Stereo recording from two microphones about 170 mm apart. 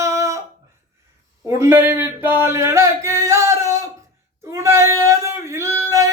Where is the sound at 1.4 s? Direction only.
15° right (ahead or behind).